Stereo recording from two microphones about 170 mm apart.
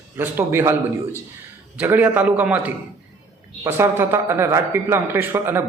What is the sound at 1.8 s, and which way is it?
A man's voice, 10° right (ahead or behind).